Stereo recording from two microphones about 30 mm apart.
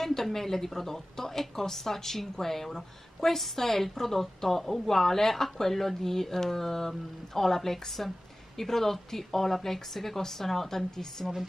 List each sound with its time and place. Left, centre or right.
0.0 s a woman's voice: centre